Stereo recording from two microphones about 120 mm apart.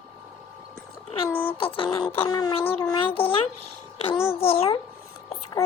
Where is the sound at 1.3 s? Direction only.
15° left (ahead or behind).